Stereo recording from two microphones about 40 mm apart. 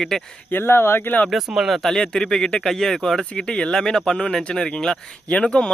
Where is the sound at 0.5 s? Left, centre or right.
Left.